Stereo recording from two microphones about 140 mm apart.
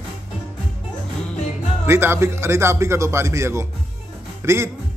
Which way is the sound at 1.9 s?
15° right (ahead or behind).